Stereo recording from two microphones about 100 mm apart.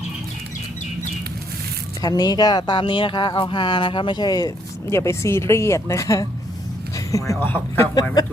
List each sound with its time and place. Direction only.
2.0 s speech: 40° left (ahead or behind)
4.9 s speech: 30° left (ahead or behind)
6.9 s a sound: 35° left (ahead or behind)
7.3 s speech: 20° left (ahead or behind)